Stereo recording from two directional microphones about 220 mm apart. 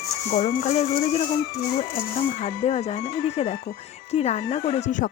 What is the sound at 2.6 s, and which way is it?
Speech, 30° left (ahead or behind).